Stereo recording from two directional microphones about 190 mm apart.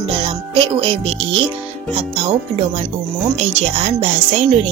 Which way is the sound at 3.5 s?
35° right (ahead or behind).